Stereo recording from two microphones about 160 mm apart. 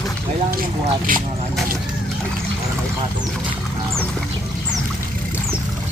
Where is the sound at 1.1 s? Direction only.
60° right (ahead or behind).